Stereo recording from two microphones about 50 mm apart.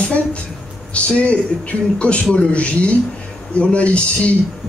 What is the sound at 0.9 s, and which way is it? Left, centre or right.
Speech, left.